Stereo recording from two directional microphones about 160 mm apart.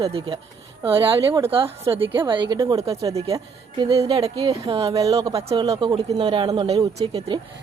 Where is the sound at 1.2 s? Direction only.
20° right (ahead or behind).